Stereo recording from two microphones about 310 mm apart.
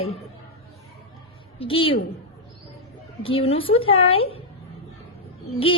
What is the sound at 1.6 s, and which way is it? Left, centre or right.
Speech, centre.